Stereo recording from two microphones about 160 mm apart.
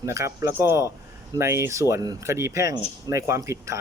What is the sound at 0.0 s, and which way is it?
Speech, 20° right (ahead or behind).